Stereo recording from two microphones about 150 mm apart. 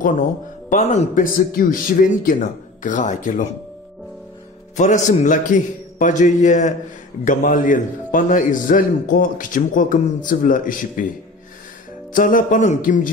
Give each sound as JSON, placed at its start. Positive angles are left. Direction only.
{"t": 0.7, "sound": "a man's voice", "side_deg": 55}
{"t": 2.8, "sound": "a man's voice", "side_deg": 55}
{"t": 4.7, "sound": "a man's voice", "side_deg": 55}
{"t": 12.1, "sound": "a man's voice", "side_deg": 65}